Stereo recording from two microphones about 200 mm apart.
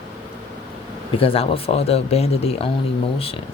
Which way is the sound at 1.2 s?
30° left (ahead or behind).